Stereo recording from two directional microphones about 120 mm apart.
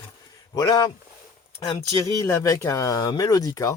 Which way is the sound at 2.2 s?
20° left (ahead or behind).